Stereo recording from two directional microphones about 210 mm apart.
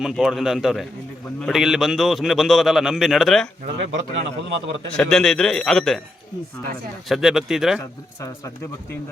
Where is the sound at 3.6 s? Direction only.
40° right (ahead or behind).